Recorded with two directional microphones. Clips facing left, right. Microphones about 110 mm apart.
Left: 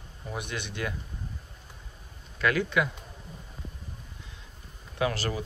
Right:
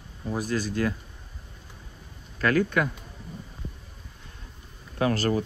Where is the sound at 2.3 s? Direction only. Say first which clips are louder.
Right 3 dB; 40° right (ahead or behind).